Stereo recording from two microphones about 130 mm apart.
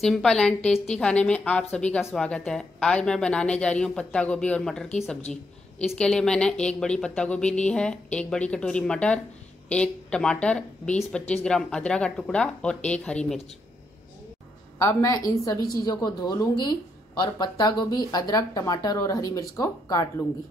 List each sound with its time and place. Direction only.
0.0 s a woman's voice: 5° left (ahead or behind)
5.9 s a woman's voice: 5° left (ahead or behind)
14.8 s speech: 25° left (ahead or behind)